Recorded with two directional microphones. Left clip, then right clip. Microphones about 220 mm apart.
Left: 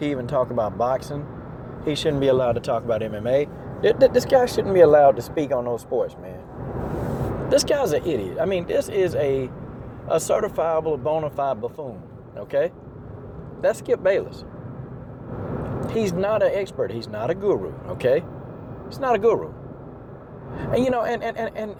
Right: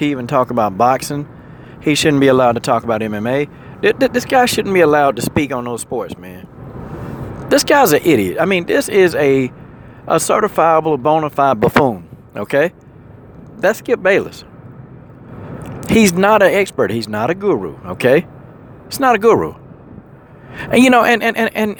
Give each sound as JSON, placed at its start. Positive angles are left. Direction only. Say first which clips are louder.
{"t": 0.8, "sound": "speech", "louder": "right 9 dB", "side_deg": -35}
{"t": 7.4, "sound": "speech", "louder": "right 9 dB", "side_deg": -35}
{"t": 15.8, "sound": "speech", "louder": "right 12 dB", "side_deg": -40}
{"t": 18.9, "sound": "speech", "louder": "right 8 dB", "side_deg": -35}
{"t": 20.6, "sound": "speech", "louder": "right 11 dB", "side_deg": -35}